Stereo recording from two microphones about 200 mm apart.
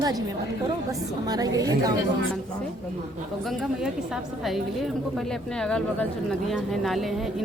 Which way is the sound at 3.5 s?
Centre (ahead or behind).